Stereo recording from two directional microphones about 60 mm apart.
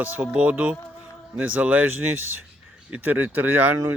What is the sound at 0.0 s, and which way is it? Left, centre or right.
Speech, right.